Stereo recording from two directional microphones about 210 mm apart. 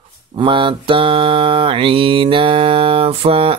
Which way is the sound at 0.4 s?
25° right (ahead or behind).